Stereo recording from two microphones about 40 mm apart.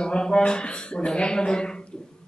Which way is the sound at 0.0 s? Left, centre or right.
Left.